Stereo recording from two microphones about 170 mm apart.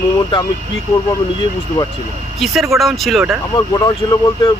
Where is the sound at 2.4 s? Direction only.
Centre (ahead or behind).